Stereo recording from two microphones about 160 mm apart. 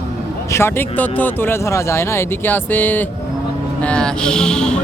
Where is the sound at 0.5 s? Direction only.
15° left (ahead or behind).